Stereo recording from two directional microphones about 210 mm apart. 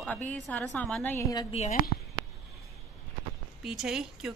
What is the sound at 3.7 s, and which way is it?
Speech, centre (ahead or behind).